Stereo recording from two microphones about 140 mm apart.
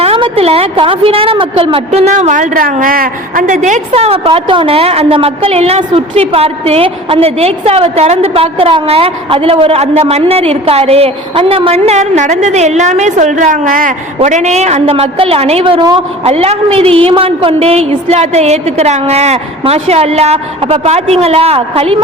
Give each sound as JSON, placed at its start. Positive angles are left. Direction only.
{"t": 0.0, "sound": "a woman's voice", "side_deg": -45}
{"t": 14.2, "sound": "a woman's voice", "side_deg": -55}
{"t": 16.2, "sound": "a woman's voice", "side_deg": -45}